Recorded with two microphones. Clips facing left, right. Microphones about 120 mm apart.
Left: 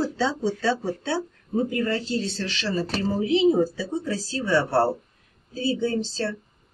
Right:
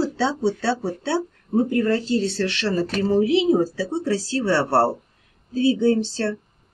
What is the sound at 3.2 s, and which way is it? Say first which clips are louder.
Speech: left 3 dB; 75° right (ahead or behind).